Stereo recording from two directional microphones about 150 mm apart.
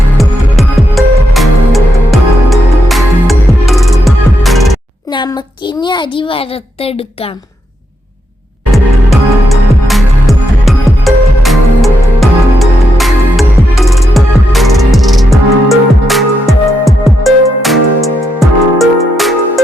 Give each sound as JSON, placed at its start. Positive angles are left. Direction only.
{"t": 0.2, "sound": "music", "side_deg": 0}
{"t": 5.1, "sound": "a sound", "side_deg": 30}
{"t": 8.7, "sound": "music", "side_deg": 0}